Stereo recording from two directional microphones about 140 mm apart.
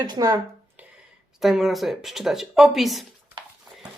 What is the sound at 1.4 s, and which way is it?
Speech, centre (ahead or behind).